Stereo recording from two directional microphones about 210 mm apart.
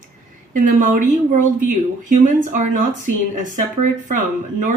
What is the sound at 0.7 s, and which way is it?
Speech, 35° right (ahead or behind).